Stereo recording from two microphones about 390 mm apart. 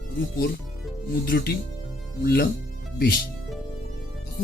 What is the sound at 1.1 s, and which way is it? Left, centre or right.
Speech, left.